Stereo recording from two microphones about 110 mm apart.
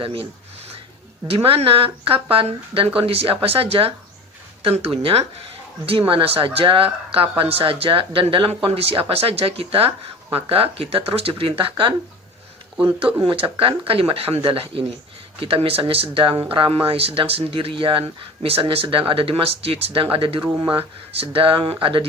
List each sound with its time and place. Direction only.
0.0 s speech: 55° right (ahead or behind)
1.3 s speech: 60° right (ahead or behind)
13.2 s speech: 55° right (ahead or behind)